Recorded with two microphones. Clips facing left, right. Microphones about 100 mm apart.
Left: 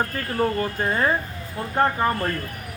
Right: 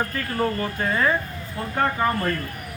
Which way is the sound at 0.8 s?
30° left (ahead or behind).